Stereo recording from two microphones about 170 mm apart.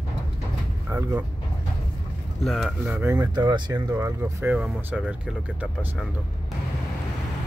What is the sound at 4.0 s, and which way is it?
Speech, 10° right (ahead or behind).